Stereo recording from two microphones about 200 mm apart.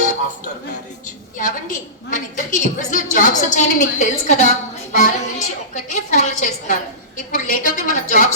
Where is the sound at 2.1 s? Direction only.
40° left (ahead or behind).